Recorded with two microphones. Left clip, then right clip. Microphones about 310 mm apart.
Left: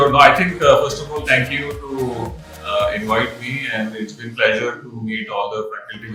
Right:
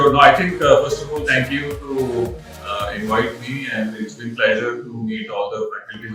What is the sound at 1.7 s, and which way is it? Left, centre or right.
Music, centre.